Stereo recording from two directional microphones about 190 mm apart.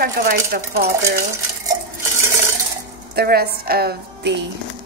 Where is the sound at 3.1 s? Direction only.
55° right (ahead or behind).